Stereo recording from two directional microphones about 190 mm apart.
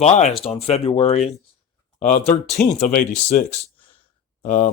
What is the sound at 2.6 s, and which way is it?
Speech, 10° left (ahead or behind).